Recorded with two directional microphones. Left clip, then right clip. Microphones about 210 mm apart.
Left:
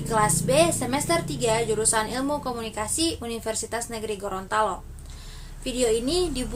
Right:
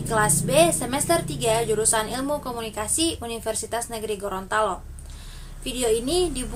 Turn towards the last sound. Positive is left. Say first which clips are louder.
# right 1 dB
turn(degrees=0)  # may be behind; listen again after turning